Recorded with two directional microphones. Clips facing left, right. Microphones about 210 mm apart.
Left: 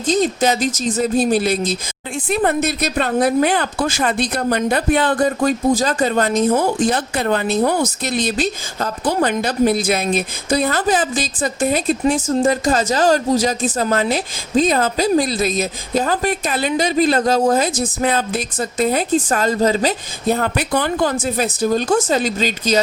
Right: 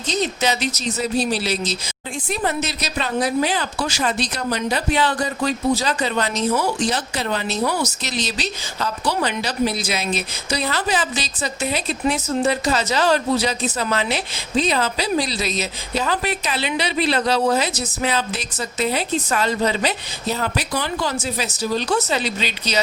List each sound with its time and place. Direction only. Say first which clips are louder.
0.0 s speech: left 6 dB; 50° left (ahead or behind)